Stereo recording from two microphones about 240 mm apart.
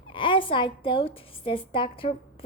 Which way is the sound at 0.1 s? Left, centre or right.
Left.